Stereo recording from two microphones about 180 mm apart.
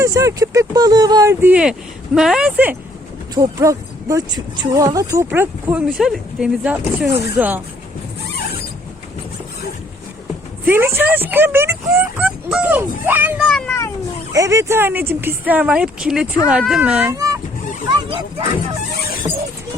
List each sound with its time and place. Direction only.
0.0 s speech: 15° right (ahead or behind)
10.7 s speech: 10° right (ahead or behind)
13.5 s speech: 5° left (ahead or behind)
14.3 s speech: 15° right (ahead or behind)
17.2 s vehicle: 20° right (ahead or behind)
17.8 s speech: 25° right (ahead or behind)